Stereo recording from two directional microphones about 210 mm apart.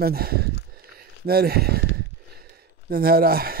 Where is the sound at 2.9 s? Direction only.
45° right (ahead or behind).